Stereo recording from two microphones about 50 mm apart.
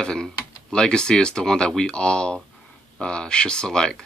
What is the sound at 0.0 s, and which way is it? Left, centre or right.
Speech, centre.